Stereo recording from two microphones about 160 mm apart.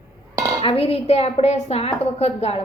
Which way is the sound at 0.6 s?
35° left (ahead or behind).